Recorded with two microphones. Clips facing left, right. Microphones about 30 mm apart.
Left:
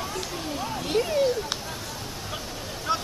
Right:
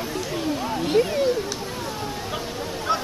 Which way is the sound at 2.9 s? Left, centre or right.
Centre.